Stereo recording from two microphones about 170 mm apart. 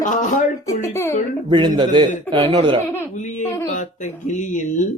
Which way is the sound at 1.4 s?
30° right (ahead or behind).